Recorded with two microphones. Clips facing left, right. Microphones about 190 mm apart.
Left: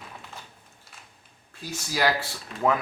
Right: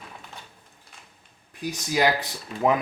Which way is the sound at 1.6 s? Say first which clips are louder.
Right 3 dB; 20° right (ahead or behind).